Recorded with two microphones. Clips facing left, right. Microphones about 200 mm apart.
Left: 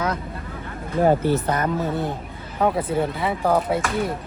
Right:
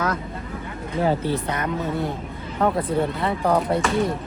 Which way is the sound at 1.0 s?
45° left (ahead or behind).